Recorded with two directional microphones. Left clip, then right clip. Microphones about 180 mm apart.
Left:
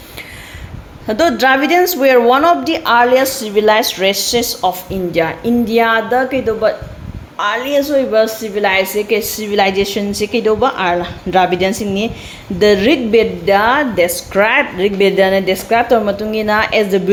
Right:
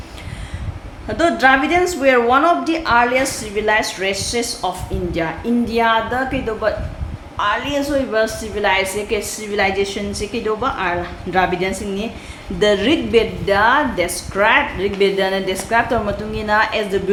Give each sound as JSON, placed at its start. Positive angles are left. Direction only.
{"t": 1.0, "sound": "a woman's voice", "side_deg": 35}